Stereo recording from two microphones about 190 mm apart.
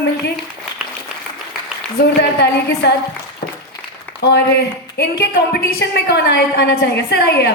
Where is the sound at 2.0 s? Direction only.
60° left (ahead or behind).